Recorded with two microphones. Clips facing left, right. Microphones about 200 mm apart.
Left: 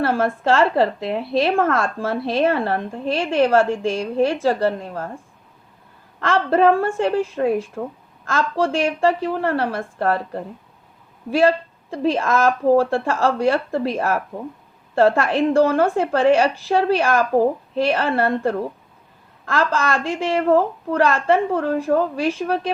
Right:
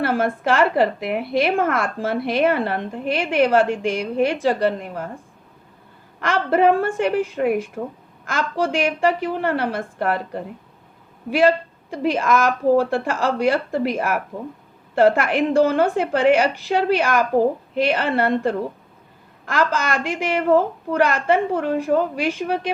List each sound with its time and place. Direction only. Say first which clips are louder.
0.0 s a woman's voice: left 1 dB; 20° right (ahead or behind)
6.2 s a woman's voice: left 1 dB; 20° right (ahead or behind)
19.5 s a woman's voice: left 1 dB; 20° right (ahead or behind)